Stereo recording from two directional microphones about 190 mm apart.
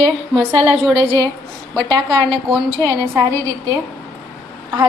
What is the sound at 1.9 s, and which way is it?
A woman's voice, 25° right (ahead or behind).